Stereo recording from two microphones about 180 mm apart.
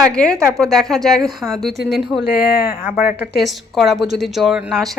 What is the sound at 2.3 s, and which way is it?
Speech, 55° left (ahead or behind).